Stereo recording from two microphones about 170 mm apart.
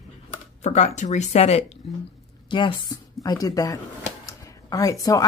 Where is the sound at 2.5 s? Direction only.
25° left (ahead or behind).